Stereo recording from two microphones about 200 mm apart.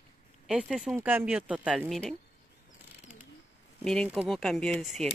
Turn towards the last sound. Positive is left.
turn(degrees=0)  # may be behind; listen again after turning